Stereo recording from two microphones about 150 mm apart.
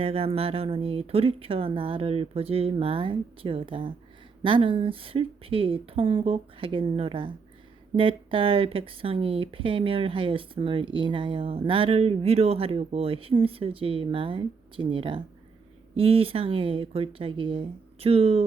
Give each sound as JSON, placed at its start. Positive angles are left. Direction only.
{"t": 0.0, "sound": "speech", "side_deg": -40}